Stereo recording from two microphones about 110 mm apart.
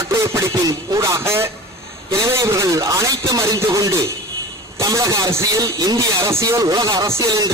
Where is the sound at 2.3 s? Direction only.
25° right (ahead or behind).